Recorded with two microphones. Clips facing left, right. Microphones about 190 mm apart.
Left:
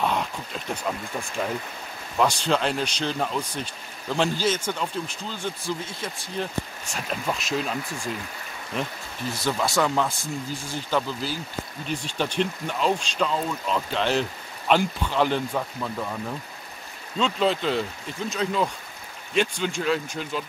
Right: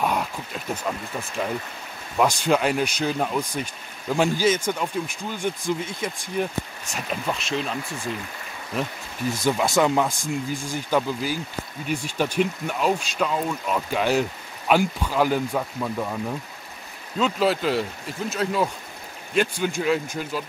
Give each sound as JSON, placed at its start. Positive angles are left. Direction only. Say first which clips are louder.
{"t": 0.0, "sound": "speech", "louder": "right 1 dB", "side_deg": -5}
{"t": 9.8, "sound": "speech", "louder": "right 3 dB", "side_deg": -15}
{"t": 17.2, "sound": "speech", "louder": "right 2 dB", "side_deg": -5}